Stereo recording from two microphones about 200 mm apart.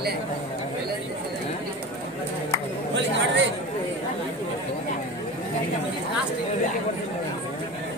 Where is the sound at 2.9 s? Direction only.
65° right (ahead or behind).